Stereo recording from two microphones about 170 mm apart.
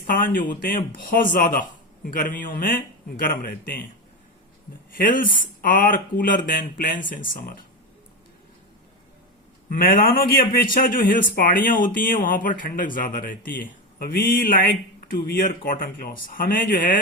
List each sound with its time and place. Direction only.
0.1 s a man's voice: 55° left (ahead or behind)
4.9 s speech: 50° left (ahead or behind)
9.6 s a man's voice: 55° left (ahead or behind)